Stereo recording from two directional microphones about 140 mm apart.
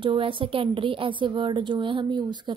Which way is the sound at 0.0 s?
35° right (ahead or behind).